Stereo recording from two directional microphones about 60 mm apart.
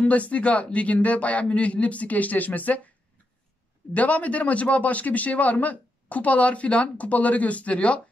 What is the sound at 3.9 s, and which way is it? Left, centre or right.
A man's voice, left.